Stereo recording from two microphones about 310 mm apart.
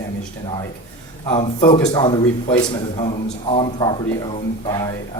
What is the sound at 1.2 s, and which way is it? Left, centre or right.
Speech, centre.